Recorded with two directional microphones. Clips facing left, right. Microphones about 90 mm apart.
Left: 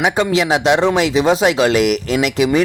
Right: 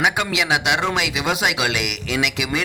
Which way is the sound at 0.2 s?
35° left (ahead or behind).